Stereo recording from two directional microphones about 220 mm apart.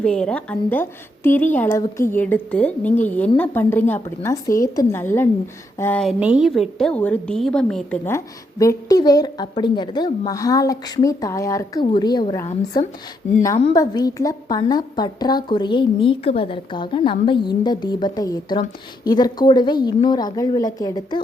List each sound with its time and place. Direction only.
0.0 s a woman's voice: 5° left (ahead or behind)